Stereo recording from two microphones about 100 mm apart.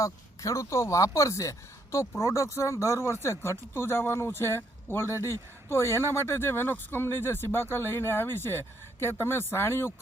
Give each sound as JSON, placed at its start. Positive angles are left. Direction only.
{"t": 0.0, "sound": "speech", "side_deg": 30}